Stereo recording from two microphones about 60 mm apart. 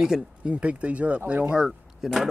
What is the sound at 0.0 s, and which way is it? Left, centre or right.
Speech, centre.